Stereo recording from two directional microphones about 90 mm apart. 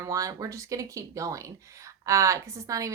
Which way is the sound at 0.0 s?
35° right (ahead or behind).